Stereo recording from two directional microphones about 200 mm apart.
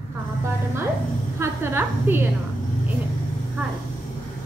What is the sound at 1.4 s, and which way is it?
Speech, 10° right (ahead or behind).